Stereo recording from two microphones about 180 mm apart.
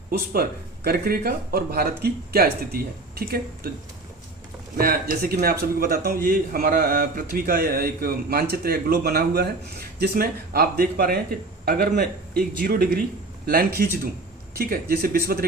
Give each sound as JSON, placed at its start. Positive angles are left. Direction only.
{"t": 0.9, "sound": "a man's voice", "side_deg": -55}
{"t": 4.8, "sound": "a man's voice", "side_deg": -55}